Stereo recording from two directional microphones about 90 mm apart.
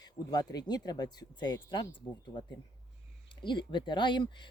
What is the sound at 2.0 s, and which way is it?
Speech, 45° left (ahead or behind).